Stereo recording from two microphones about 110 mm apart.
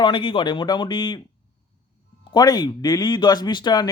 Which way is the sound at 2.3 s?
40° left (ahead or behind).